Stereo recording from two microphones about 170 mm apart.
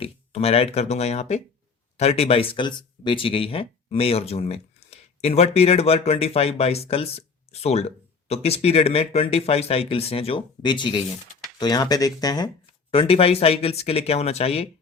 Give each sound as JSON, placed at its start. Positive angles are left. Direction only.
{"t": 0.0, "sound": "speech", "side_deg": 35}
{"t": 12.9, "sound": "speech", "side_deg": 35}